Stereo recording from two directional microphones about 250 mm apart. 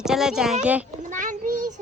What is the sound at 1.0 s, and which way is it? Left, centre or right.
Speech, right.